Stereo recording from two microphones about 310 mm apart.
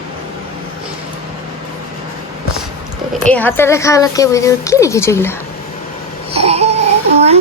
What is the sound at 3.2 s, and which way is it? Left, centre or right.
Speech, centre.